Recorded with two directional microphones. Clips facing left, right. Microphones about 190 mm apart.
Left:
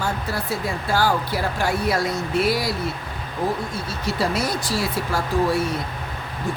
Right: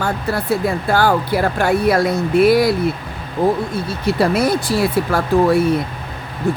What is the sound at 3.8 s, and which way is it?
Speech, 60° right (ahead or behind).